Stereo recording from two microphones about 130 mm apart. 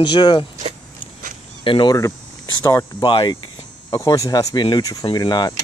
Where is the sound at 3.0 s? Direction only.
40° left (ahead or behind).